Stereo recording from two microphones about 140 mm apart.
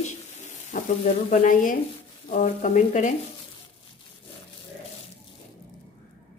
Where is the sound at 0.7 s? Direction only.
70° left (ahead or behind).